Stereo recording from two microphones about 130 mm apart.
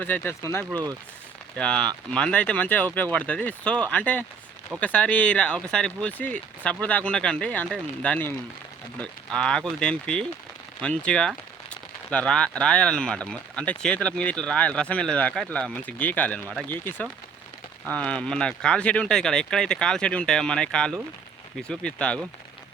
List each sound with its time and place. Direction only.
0.0 s speech: 15° left (ahead or behind)
0.7 s speech: 25° right (ahead or behind)
1.5 s speech: 5° left (ahead or behind)